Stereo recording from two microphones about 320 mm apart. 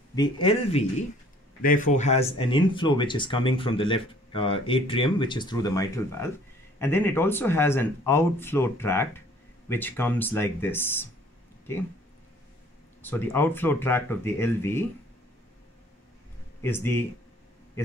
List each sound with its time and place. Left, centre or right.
0.1 s speech: centre
13.0 s speech: centre
16.6 s speech: centre